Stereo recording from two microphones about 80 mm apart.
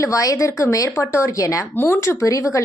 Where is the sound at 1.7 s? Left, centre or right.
Left.